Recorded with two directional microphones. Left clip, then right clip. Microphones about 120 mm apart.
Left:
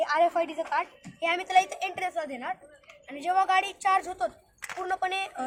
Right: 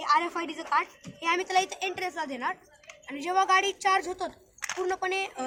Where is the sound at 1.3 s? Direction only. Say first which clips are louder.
Left 2 dB; 35° left (ahead or behind).